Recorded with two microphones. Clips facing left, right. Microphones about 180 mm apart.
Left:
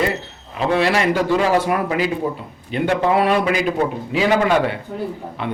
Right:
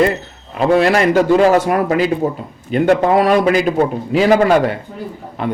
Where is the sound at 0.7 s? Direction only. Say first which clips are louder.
Right 5 dB; 45° right (ahead or behind).